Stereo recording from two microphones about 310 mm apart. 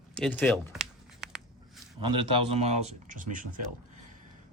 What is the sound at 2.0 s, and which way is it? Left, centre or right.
Speech, centre.